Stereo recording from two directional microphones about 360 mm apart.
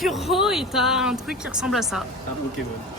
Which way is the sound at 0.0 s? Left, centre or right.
Centre.